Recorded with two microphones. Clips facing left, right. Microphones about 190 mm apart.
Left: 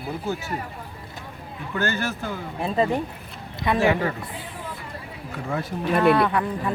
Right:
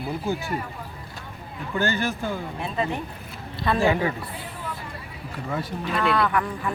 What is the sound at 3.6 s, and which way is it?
Speech, 20° left (ahead or behind).